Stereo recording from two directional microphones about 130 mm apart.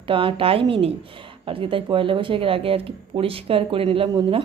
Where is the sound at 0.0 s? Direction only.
40° right (ahead or behind).